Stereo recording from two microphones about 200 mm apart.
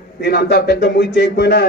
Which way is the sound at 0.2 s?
55° left (ahead or behind).